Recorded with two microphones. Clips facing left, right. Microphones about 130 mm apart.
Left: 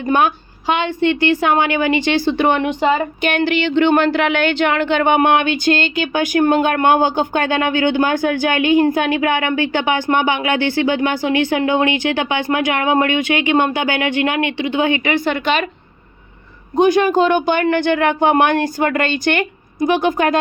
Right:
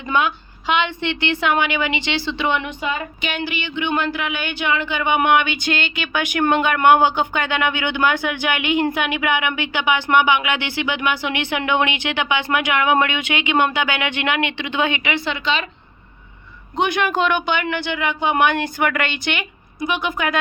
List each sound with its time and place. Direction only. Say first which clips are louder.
0.0 s speech: left 5 dB; 50° left (ahead or behind)
3.2 s speech: left 9 dB; 55° left (ahead or behind); by 14.9 s 35° left (ahead or behind)
15.0 s speech: left 5 dB; 45° left (ahead or behind)
16.7 s speech: left 7 dB; 35° left (ahead or behind)